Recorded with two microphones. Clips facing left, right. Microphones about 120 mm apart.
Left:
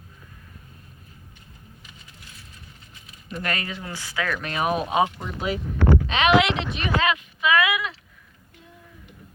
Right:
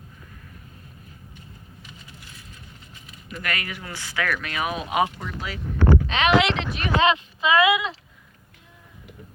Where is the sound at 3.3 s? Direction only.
30° left (ahead or behind).